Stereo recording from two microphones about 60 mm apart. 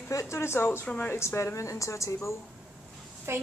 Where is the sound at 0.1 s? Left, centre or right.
Left.